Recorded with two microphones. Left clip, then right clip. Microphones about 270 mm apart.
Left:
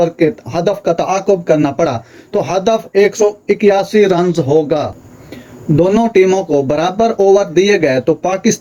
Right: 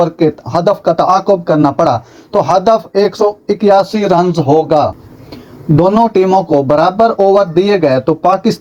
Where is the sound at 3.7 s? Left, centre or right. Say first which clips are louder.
Right 2 dB; centre.